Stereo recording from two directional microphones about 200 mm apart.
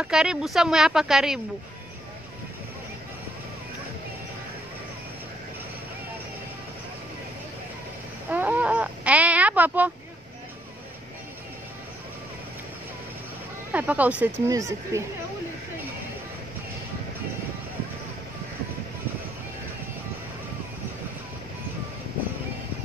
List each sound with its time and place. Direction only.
0.0 s speech: 5° right (ahead or behind)
8.3 s a sound: 10° right (ahead or behind)
13.7 s speech: 10° right (ahead or behind)